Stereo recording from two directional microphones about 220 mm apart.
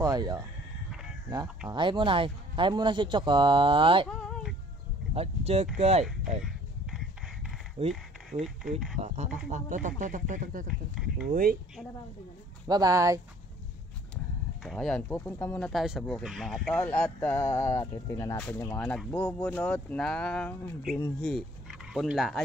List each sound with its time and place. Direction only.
0.0 s speech: 15° right (ahead or behind)
1.7 s a man's voice: 20° right (ahead or behind)
4.1 s a sound: 5° left (ahead or behind)
5.1 s a man's voice: 25° right (ahead or behind)
6.4 s a sound: centre (ahead or behind)
7.9 s speech: centre (ahead or behind)
9.0 s speech: 30° right (ahead or behind)
12.6 s speech: 15° right (ahead or behind)
14.1 s speech: centre (ahead or behind)